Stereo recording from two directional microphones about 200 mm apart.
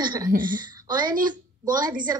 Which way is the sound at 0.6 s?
20° right (ahead or behind).